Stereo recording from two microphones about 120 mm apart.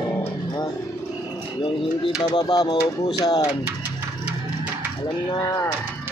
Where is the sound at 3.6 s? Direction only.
15° right (ahead or behind).